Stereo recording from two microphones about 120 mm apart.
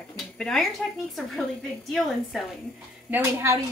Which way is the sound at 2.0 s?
Centre (ahead or behind).